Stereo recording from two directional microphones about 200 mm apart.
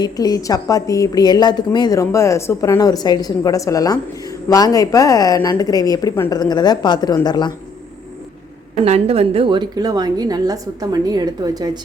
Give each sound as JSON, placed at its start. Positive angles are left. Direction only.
{"t": 0.0, "sound": "a woman's voice", "side_deg": 20}
{"t": 8.7, "sound": "a woman's voice", "side_deg": -30}